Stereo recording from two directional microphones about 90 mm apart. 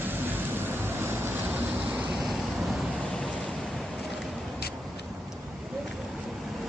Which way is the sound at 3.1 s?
5° left (ahead or behind).